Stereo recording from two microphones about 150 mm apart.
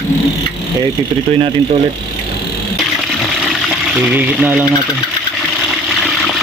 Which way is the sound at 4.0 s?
10° right (ahead or behind).